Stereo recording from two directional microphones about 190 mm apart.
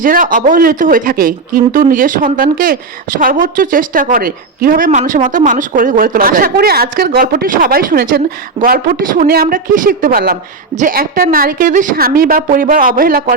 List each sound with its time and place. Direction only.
0.0 s speech: 45° right (ahead or behind)